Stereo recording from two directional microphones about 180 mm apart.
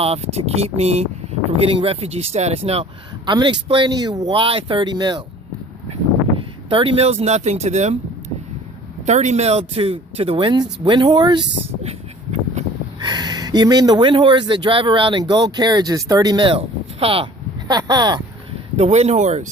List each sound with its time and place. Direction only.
0.0 s speech: 35° right (ahead or behind)
3.2 s speech: 25° right (ahead or behind)
9.0 s speech: 40° right (ahead or behind)
11.8 s a sound: 40° right (ahead or behind)
13.0 s speech: 25° right (ahead or behind)
18.8 s speech: 35° right (ahead or behind)